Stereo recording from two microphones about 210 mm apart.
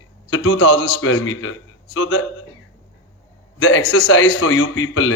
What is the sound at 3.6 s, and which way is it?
A man's voice, 65° left (ahead or behind).